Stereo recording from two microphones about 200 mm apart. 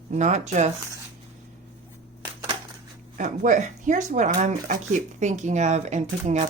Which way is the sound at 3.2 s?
40° right (ahead or behind).